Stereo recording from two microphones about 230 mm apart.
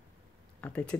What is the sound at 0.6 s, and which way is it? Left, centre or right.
Speech, centre.